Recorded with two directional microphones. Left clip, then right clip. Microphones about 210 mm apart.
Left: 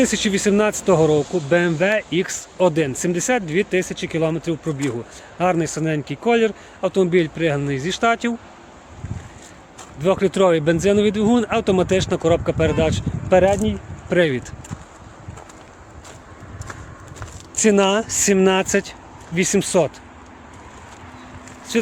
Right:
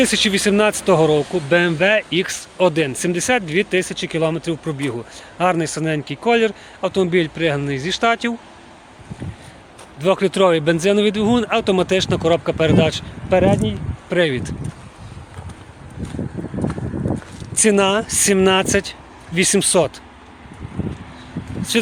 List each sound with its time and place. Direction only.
0.0 s speech: 5° left (ahead or behind)
1.2 s speech: 40° right (ahead or behind)
1.5 s speech: 5° left (ahead or behind)
10.0 s speech: 5° left (ahead or behind)
13.3 s speech: 20° left (ahead or behind)
17.5 s speech: 10° left (ahead or behind)
21.7 s speech: centre (ahead or behind)